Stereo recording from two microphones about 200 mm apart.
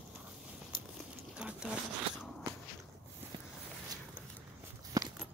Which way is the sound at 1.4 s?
5° right (ahead or behind).